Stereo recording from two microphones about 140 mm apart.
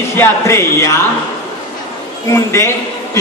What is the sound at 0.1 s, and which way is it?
Speech, 20° left (ahead or behind).